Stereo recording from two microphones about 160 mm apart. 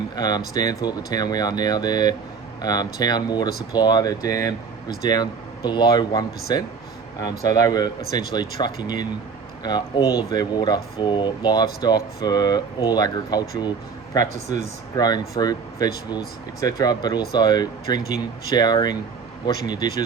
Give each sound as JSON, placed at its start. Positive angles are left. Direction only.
{"t": 0.2, "sound": "speech", "side_deg": 25}